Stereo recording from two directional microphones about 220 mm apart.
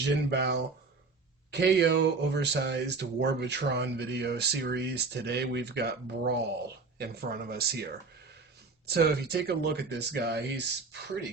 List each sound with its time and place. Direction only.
0.0 s speech: 50° right (ahead or behind)
8.9 s speech: 45° right (ahead or behind)